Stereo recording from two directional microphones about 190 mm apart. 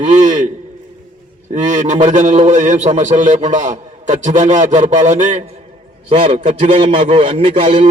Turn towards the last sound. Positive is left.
turn(degrees=-30)  # may be behind; listen again after turning